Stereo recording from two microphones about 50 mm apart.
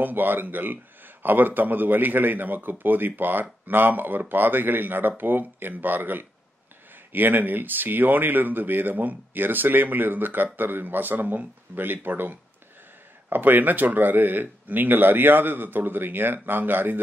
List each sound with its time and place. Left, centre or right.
0.0 s speech: right